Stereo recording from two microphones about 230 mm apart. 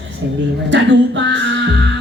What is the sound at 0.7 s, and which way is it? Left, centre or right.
Music, right.